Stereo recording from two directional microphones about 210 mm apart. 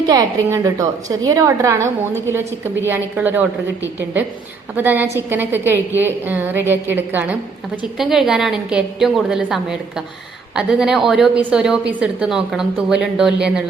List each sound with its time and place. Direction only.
0.1 s a woman's voice: 15° right (ahead or behind)
4.8 s a woman's voice: 10° right (ahead or behind)